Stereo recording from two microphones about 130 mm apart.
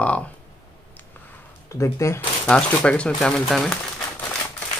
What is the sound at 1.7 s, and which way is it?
Speech, 25° left (ahead or behind).